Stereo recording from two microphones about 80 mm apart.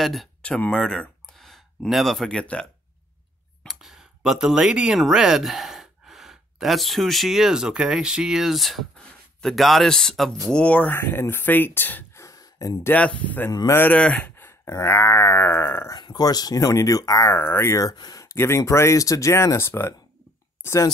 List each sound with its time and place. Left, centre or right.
0.0 s speech: centre
0.6 s speech: centre
3.6 s speech: centre
11.0 s speech: left
12.2 s a sound: left
12.9 s speech: centre
14.3 s a sound: left
16.0 s speech: left
17.3 s speech: left